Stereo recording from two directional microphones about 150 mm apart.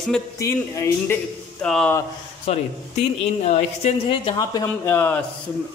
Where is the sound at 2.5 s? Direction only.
40° left (ahead or behind).